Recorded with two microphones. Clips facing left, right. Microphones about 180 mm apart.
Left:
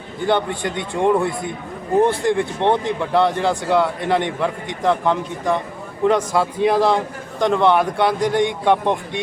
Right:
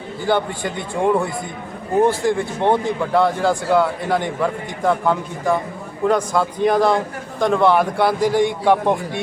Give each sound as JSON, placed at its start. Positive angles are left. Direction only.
{"t": 0.3, "sound": "a man's voice", "side_deg": -5}